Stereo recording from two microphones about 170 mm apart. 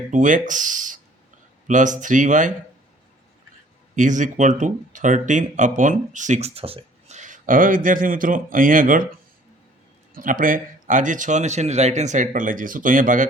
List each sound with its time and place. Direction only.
0.1 s speech: 50° right (ahead or behind)
3.9 s speech: 50° right (ahead or behind)
10.2 s speech: 55° right (ahead or behind)